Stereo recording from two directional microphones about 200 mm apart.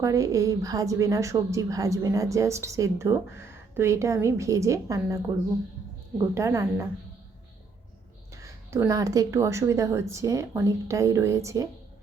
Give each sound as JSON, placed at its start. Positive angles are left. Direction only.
{"t": 0.0, "sound": "a woman's voice", "side_deg": -15}
{"t": 8.4, "sound": "a woman's voice", "side_deg": -15}